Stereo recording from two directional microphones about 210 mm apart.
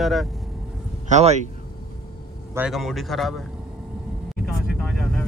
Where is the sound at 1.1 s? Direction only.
30° right (ahead or behind).